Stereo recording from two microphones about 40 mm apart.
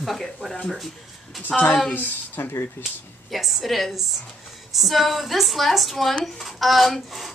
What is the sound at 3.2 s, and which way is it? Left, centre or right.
A woman's voice, centre.